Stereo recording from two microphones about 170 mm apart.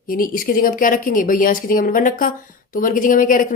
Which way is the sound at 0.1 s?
55° left (ahead or behind).